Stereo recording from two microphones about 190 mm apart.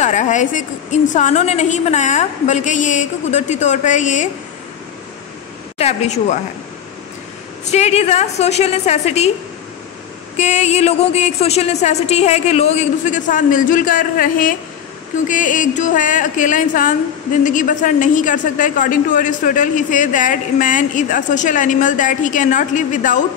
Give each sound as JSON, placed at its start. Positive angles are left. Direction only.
{"t": 0.0, "sound": "a woman's voice", "side_deg": 40}
{"t": 5.8, "sound": "a woman's voice", "side_deg": 35}
{"t": 7.7, "sound": "a woman's voice", "side_deg": 35}
{"t": 10.3, "sound": "a woman's voice", "side_deg": 40}